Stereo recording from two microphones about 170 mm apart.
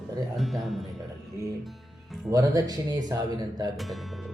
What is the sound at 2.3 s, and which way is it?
Speech, 20° right (ahead or behind).